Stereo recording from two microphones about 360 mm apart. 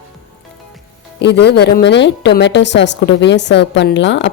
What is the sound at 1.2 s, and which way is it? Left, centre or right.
A woman's voice, left.